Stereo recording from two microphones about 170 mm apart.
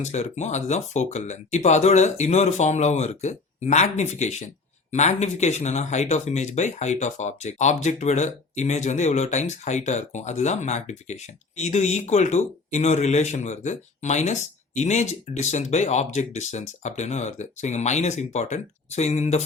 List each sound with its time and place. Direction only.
0.0 s speech: 40° left (ahead or behind)